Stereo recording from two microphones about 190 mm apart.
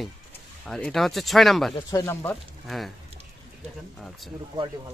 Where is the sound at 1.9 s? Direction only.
15° left (ahead or behind).